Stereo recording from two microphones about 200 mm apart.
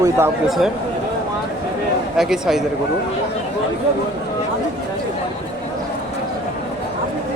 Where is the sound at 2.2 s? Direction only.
Centre (ahead or behind).